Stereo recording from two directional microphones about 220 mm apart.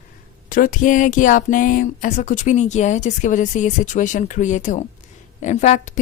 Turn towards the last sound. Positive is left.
turn(degrees=30)  # may be behind; listen again after turning